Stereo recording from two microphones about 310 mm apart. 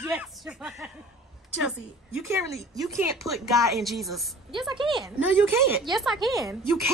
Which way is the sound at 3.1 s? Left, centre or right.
Centre.